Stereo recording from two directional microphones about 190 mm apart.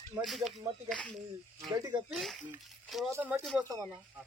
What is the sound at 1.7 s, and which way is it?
Speech, 20° right (ahead or behind).